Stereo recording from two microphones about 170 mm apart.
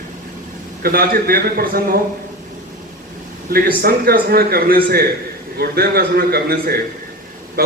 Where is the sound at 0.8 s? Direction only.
60° right (ahead or behind).